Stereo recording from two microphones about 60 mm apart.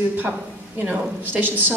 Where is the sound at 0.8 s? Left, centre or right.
Right.